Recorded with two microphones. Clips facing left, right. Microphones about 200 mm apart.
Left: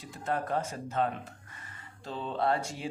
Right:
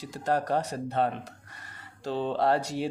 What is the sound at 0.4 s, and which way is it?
Speech, 75° right (ahead or behind).